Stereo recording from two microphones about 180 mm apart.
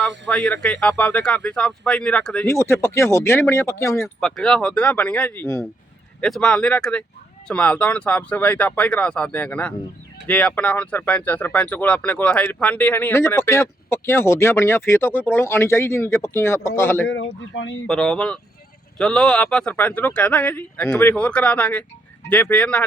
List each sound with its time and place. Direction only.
0.3 s speech: 5° left (ahead or behind)
4.2 s speech: 5° left (ahead or behind)
6.1 s speech: 5° left (ahead or behind)
17.1 s speech: 90° left
17.8 s speech: 5° left (ahead or behind)